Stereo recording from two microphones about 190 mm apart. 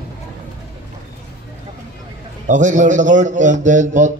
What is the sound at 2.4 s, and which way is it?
Speech, 40° right (ahead or behind).